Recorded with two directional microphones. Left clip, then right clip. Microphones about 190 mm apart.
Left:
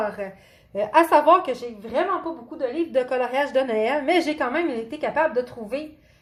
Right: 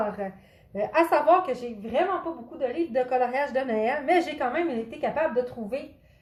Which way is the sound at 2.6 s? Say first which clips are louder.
Left 3 dB; 35° left (ahead or behind).